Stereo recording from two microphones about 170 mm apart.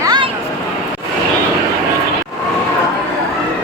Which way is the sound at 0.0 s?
25° right (ahead or behind).